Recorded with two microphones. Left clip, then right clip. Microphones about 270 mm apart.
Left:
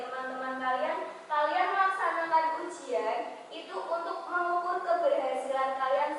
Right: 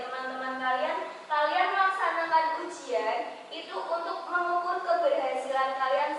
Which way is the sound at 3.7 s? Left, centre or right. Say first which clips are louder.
Right 2 dB; left.